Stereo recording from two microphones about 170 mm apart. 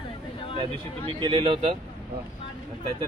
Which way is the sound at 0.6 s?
30° right (ahead or behind).